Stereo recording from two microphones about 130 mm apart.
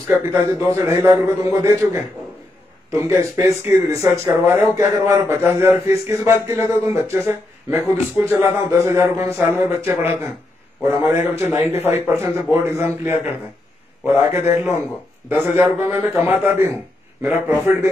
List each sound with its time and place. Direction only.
0.1 s a man's voice: 15° right (ahead or behind)